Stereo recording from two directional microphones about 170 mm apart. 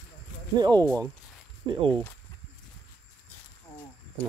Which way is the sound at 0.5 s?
25° right (ahead or behind).